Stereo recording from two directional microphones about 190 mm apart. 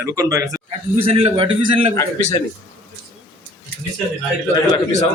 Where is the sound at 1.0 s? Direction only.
30° right (ahead or behind).